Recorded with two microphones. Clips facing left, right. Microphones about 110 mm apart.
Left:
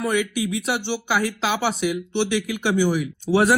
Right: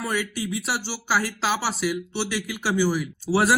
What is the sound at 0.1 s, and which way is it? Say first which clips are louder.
Speech: left 5 dB; 40° right (ahead or behind).